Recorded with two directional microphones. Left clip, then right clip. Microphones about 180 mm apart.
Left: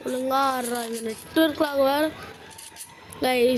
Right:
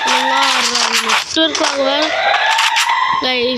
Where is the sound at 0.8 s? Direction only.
45° right (ahead or behind).